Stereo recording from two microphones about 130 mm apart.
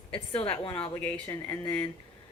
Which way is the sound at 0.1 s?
45° left (ahead or behind).